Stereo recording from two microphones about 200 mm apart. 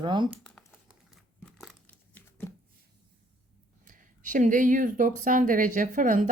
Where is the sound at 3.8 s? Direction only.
40° right (ahead or behind).